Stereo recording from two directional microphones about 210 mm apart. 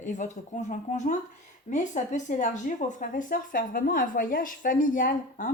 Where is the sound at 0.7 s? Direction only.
35° left (ahead or behind).